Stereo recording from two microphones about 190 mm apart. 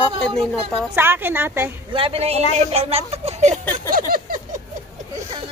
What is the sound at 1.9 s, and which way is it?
A woman's voice, 30° right (ahead or behind).